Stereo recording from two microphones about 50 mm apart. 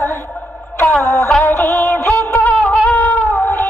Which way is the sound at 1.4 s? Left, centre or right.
Left.